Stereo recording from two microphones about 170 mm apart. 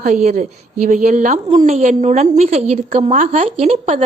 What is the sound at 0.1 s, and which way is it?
A woman's voice, 45° right (ahead or behind).